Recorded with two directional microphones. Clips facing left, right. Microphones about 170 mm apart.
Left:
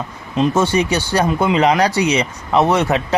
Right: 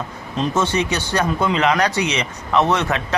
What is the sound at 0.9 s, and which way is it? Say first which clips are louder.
Speech: left 3 dB; 30° left (ahead or behind).